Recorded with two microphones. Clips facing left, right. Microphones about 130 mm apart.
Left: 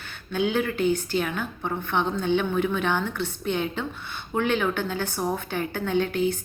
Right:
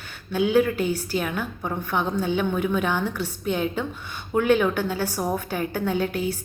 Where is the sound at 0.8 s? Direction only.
40° right (ahead or behind).